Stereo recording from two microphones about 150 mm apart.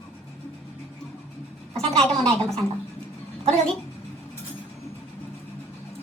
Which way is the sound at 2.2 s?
5° left (ahead or behind).